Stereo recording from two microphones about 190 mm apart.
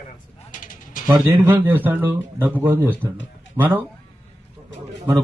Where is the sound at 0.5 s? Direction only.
45° left (ahead or behind).